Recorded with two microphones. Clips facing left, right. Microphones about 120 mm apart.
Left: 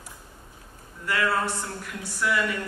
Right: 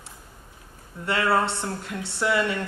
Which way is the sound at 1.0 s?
25° right (ahead or behind).